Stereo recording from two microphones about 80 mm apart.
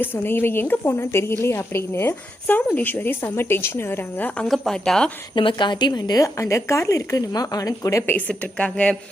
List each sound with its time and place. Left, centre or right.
0.0 s a woman's voice: left
4.4 s speech: centre
5.3 s a woman's voice: left
8.1 s a woman's voice: centre